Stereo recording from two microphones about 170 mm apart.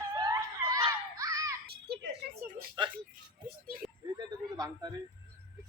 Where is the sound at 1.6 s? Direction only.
70° right (ahead or behind).